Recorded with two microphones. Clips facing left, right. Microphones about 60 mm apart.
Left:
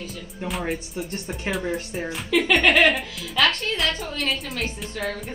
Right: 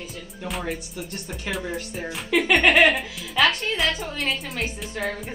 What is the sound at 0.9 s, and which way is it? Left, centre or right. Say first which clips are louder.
Speech: left 4 dB; left.